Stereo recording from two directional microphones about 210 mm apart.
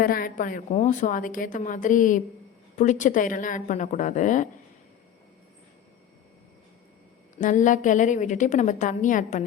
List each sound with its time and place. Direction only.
0.0 s a woman's voice: 45° left (ahead or behind)
7.3 s a woman's voice: 35° left (ahead or behind)